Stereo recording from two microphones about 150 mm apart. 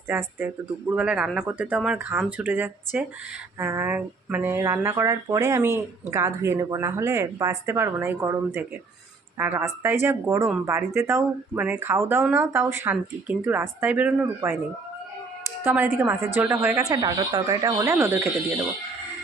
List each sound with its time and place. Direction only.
0.1 s speech: 15° right (ahead or behind)
15.6 s speech: 10° right (ahead or behind)
16.9 s speech: 25° right (ahead or behind)